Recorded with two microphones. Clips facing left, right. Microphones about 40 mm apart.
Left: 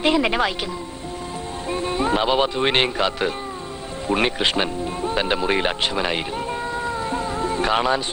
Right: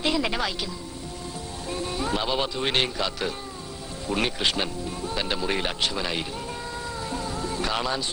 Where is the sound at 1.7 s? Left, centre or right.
Left.